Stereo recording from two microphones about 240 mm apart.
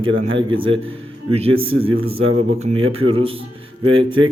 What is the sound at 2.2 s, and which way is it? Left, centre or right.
Speech, right.